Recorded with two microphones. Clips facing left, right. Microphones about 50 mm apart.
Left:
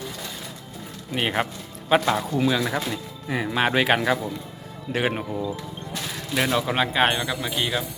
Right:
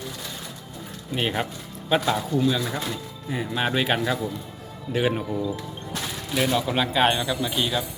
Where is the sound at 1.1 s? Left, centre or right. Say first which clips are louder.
Left 2 dB; left.